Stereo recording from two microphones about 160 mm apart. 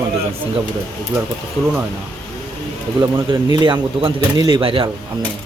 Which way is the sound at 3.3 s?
30° right (ahead or behind).